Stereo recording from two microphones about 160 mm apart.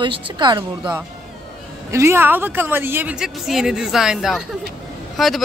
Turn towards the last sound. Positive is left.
turn(degrees=0)  # may be behind; listen again after turning